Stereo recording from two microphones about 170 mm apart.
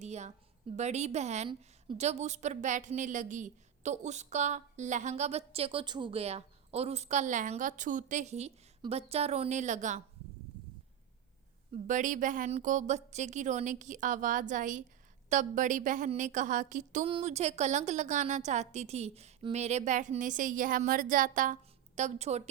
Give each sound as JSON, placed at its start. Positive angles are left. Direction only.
{"t": 0.0, "sound": "a sound", "side_deg": -40}
{"t": 0.8, "sound": "a woman's voice", "side_deg": -40}
{"t": 11.7, "sound": "a woman's voice", "side_deg": -45}